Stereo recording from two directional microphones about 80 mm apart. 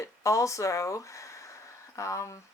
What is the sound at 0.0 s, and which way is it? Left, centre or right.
Speech, left.